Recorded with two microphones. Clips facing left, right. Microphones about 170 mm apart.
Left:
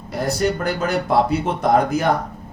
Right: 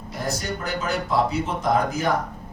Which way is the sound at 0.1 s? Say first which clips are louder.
Left 8 dB; 65° left (ahead or behind).